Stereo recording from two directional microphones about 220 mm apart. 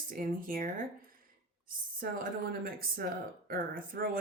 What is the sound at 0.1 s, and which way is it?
Speech, 40° right (ahead or behind).